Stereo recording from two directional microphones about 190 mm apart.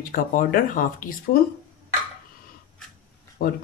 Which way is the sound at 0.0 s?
45° left (ahead or behind).